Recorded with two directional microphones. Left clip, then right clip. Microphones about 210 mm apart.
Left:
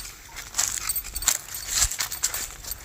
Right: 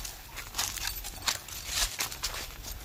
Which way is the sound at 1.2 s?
55° left (ahead or behind).